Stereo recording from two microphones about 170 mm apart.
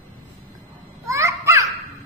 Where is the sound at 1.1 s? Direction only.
15° right (ahead or behind).